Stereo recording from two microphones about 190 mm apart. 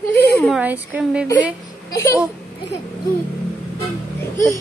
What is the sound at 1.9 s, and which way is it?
Speech, 15° left (ahead or behind).